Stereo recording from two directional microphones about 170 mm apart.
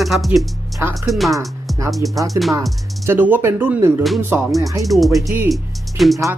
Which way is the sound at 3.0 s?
10° right (ahead or behind).